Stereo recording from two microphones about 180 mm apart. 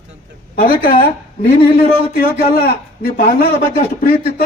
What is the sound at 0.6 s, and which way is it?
Speech, 55° left (ahead or behind).